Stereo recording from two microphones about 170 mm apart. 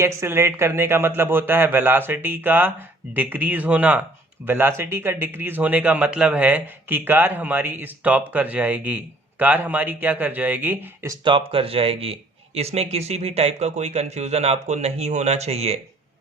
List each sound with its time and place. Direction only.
0.0 s a man's voice: 15° right (ahead or behind); by 15.8 s 40° right (ahead or behind)